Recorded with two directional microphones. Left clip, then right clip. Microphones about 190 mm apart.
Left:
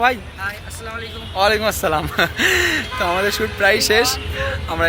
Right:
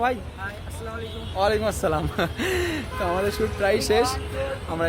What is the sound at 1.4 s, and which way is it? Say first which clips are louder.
Speech: left 6 dB; 10° left (ahead or behind).